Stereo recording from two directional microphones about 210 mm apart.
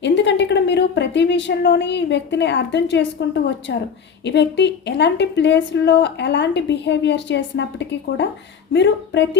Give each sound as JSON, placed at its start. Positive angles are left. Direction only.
{"t": 0.0, "sound": "a woman's voice", "side_deg": 55}